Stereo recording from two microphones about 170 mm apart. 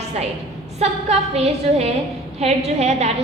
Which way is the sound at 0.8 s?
40° right (ahead or behind).